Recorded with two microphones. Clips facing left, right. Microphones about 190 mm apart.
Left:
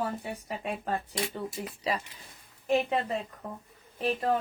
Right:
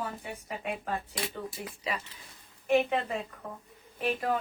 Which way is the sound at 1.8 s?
35° left (ahead or behind).